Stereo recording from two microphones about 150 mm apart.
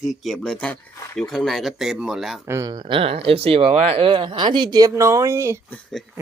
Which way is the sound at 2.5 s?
25° right (ahead or behind).